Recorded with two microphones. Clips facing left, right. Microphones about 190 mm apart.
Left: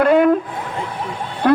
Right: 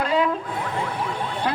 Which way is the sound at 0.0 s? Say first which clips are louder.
Left 9 dB; 60° left (ahead or behind).